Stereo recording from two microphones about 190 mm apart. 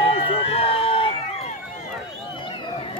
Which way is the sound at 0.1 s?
30° left (ahead or behind).